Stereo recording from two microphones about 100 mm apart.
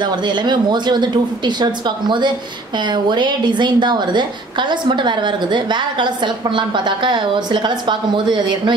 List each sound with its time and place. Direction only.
0.0 s a woman's voice: 50° right (ahead or behind)